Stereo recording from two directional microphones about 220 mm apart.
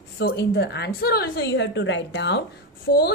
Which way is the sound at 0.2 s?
50° left (ahead or behind).